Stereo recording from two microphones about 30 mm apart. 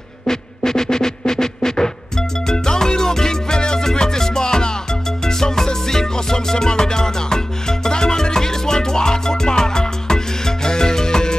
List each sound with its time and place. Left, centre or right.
0.3 s music: centre